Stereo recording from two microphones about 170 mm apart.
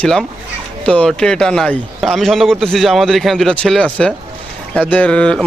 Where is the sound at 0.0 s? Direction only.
5° left (ahead or behind).